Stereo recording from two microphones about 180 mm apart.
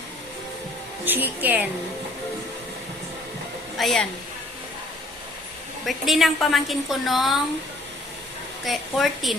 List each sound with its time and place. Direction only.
1.0 s speech: 10° right (ahead or behind)
3.8 s a woman's voice: centre (ahead or behind)
5.8 s a woman's voice: centre (ahead or behind)
8.6 s a woman's voice: centre (ahead or behind)